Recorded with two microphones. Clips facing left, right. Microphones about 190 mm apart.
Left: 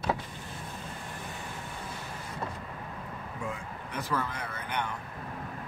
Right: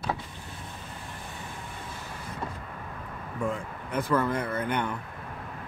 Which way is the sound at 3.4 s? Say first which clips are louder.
Right 8 dB; 55° right (ahead or behind).